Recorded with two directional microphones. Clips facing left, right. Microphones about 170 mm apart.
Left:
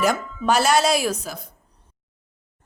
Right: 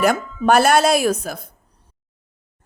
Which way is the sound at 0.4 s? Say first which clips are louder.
Right 4 dB; 55° right (ahead or behind).